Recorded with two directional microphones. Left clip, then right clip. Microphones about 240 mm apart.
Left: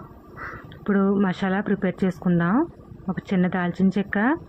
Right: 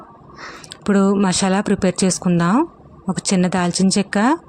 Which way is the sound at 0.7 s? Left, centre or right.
Right.